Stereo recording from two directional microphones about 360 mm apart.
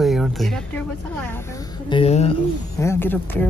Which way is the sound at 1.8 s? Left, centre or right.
Centre.